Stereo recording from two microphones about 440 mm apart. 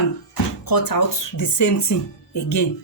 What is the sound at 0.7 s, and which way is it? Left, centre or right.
Speech, left.